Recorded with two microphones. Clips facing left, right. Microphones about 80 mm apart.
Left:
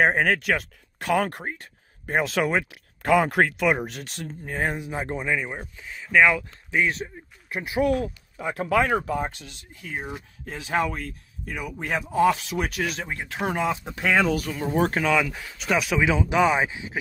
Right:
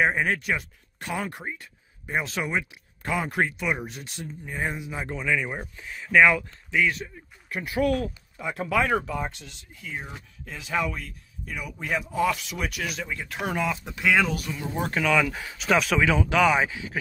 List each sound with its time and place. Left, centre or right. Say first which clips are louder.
0.0 s speech: left 3 dB; left
4.7 s speech: left 3 dB; left
5.5 s speech: right 1 dB; centre
6.7 s speech: left 1 dB; left
9.0 s speech: left 3 dB; left
9.4 s speech: left 1 dB; left
13.2 s speech: left 2 dB; left
14.9 s speech: left 1 dB; left
15.2 s speech: right 2 dB; centre
16.1 s speech: left 2 dB; centre